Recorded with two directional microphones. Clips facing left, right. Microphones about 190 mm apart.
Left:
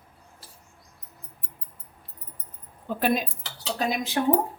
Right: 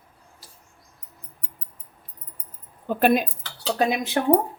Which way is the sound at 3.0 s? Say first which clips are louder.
Right 5 dB; 55° right (ahead or behind).